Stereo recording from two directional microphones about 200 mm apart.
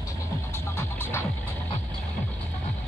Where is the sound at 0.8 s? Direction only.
10° left (ahead or behind).